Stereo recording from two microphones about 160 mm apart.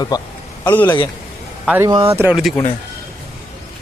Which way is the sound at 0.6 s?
10° left (ahead or behind).